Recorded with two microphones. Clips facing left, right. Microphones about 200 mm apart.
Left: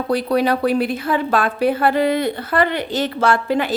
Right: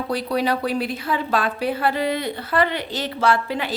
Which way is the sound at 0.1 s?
55° left (ahead or behind).